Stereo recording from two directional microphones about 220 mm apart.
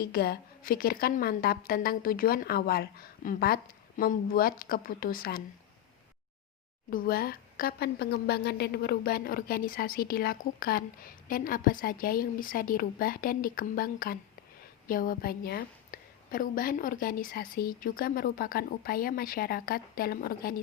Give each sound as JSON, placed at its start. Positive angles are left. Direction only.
{"t": 0.0, "sound": "a woman's voice", "side_deg": 45}
{"t": 6.9, "sound": "a woman's voice", "side_deg": 45}